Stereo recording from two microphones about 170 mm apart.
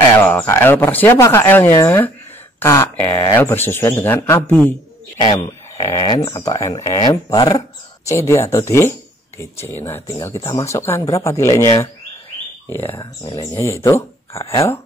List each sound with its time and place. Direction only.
0.2 s speech: 10° left (ahead or behind)
5.1 s speech: 25° left (ahead or behind)
13.0 s speech: 25° left (ahead or behind)